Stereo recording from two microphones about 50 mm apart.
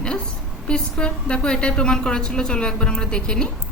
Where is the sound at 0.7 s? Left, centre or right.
Centre.